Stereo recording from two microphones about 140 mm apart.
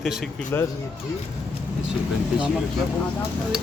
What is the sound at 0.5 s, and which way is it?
Speech, 15° left (ahead or behind).